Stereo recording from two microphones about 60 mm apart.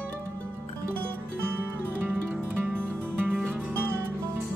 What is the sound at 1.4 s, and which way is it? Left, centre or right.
Music, right.